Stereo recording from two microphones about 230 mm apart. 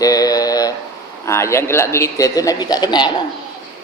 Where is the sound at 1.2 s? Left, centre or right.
Centre.